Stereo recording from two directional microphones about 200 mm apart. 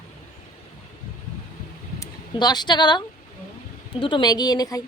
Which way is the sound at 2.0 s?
20° left (ahead or behind).